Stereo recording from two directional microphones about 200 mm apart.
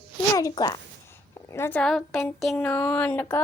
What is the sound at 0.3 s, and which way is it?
A child's voice, 20° left (ahead or behind).